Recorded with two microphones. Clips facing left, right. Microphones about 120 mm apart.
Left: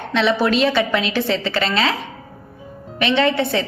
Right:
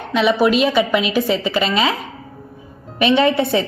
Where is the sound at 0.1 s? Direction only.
10° right (ahead or behind).